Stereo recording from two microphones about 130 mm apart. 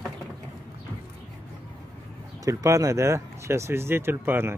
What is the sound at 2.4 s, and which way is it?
Speech, 25° right (ahead or behind).